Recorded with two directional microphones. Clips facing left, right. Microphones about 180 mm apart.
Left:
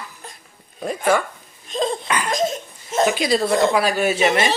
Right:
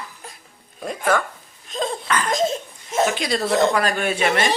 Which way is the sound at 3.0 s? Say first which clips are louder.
Left 3 dB; 5° left (ahead or behind).